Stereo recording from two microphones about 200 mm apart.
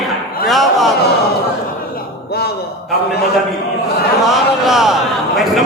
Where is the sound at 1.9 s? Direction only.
50° left (ahead or behind).